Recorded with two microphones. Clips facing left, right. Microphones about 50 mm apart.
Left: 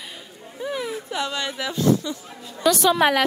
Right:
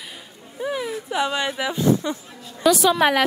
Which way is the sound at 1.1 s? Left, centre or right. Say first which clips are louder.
Right 7 dB; centre.